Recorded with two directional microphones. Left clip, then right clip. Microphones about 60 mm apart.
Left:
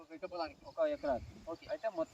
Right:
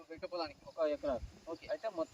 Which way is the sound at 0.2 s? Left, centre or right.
Right.